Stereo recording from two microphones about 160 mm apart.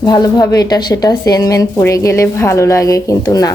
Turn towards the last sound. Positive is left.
turn(degrees=20)  # may be behind; listen again after turning